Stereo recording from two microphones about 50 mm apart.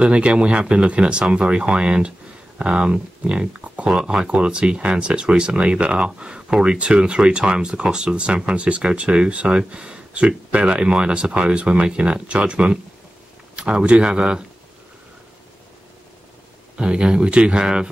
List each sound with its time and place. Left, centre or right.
0.0 s speech: right
16.7 s speech: right